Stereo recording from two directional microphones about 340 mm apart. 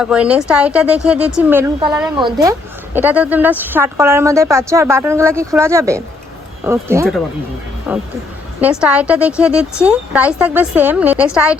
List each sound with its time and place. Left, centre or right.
0.0 s a woman's voice: centre